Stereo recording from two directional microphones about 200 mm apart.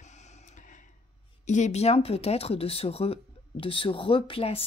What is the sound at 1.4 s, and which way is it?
Speech, 35° left (ahead or behind).